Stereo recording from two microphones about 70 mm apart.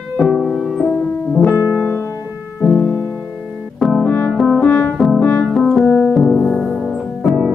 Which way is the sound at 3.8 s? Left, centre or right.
Centre.